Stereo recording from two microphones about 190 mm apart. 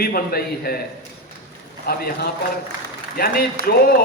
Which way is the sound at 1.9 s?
55° left (ahead or behind).